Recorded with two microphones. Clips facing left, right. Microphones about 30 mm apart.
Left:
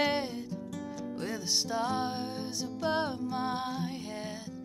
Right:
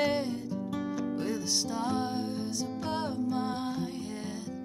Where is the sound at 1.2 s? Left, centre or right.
Centre.